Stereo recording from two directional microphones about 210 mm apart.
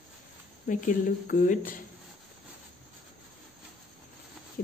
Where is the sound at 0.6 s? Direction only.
40° left (ahead or behind).